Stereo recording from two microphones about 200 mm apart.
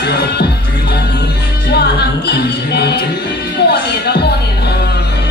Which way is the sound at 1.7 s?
55° left (ahead or behind).